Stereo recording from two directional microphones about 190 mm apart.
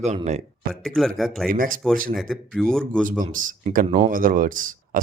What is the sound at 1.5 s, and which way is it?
Speech, 45° right (ahead or behind).